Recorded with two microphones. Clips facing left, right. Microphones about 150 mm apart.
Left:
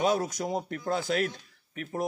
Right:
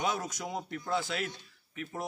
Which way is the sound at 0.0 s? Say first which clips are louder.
Left 7 dB; 35° left (ahead or behind).